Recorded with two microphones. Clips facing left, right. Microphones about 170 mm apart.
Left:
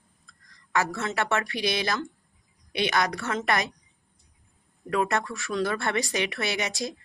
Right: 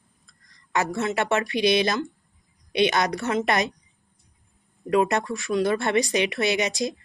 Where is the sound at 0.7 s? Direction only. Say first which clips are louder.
Right 3 dB; 20° right (ahead or behind).